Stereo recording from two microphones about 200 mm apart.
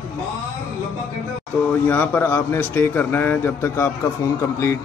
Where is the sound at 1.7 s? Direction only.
10° left (ahead or behind).